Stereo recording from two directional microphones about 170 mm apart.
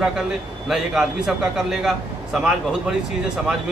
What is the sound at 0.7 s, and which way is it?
A man's voice, centre (ahead or behind).